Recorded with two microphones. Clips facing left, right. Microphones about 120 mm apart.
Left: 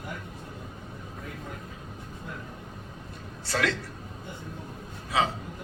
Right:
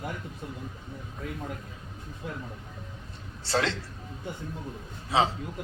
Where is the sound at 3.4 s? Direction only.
25° right (ahead or behind).